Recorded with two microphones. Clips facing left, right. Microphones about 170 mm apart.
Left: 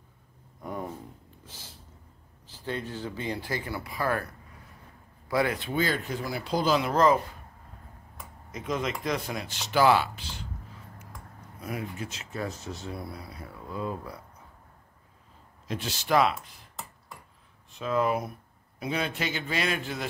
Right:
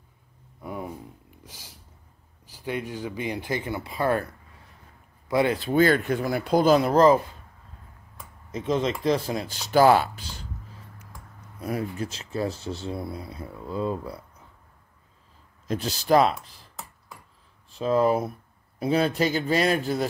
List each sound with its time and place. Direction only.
0.6 s a sound: 5° right (ahead or behind)
2.4 s speech: 10° right (ahead or behind)
5.3 s speech: 25° right (ahead or behind)
5.7 s speech: 55° right (ahead or behind); by 7.2 s 35° right (ahead or behind)
8.5 s speech: 30° right (ahead or behind)
11.6 s speech: 35° right (ahead or behind)
15.7 s speech: 40° right (ahead or behind)
17.6 s speech: 35° right (ahead or behind)